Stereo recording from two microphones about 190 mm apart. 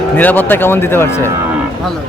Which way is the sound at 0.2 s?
10° left (ahead or behind).